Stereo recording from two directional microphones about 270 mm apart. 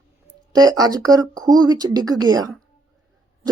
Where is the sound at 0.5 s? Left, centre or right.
Centre.